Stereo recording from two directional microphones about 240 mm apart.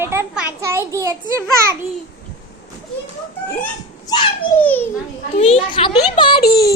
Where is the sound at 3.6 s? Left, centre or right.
Centre.